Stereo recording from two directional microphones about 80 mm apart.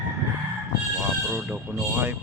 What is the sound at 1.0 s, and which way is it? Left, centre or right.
Speech, centre.